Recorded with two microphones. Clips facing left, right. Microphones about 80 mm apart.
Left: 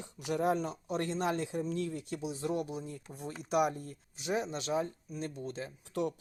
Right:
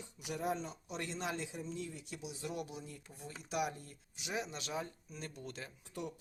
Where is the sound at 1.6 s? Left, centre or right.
Left.